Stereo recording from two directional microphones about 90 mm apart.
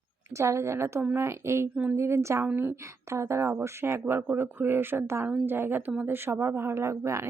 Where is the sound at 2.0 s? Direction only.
30° right (ahead or behind).